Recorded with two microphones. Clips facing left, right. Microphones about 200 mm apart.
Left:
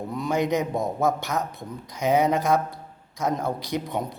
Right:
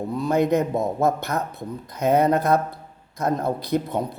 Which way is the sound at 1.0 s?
60° right (ahead or behind).